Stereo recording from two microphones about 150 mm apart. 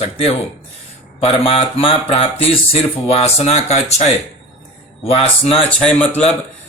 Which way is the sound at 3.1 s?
45° left (ahead or behind).